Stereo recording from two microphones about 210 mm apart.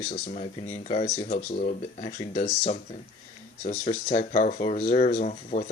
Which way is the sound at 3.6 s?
30° left (ahead or behind).